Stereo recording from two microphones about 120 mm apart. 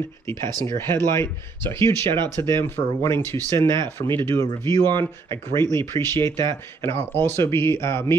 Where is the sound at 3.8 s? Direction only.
40° right (ahead or behind).